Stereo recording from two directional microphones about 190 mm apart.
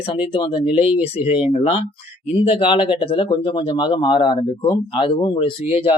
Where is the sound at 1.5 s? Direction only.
35° left (ahead or behind).